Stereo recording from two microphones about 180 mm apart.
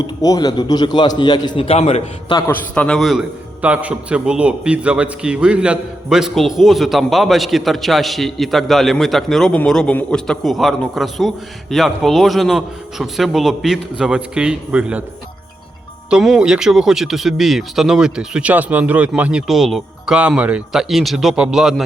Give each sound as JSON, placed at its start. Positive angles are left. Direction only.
{"t": 0.0, "sound": "a man's voice", "side_deg": 20}
{"t": 2.5, "sound": "a man's voice", "side_deg": 5}
{"t": 16.0, "sound": "a man's voice", "side_deg": -5}